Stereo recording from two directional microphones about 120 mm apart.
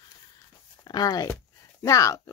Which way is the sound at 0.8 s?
35° left (ahead or behind).